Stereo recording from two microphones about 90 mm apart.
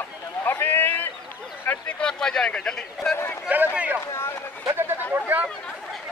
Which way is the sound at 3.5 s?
15° right (ahead or behind).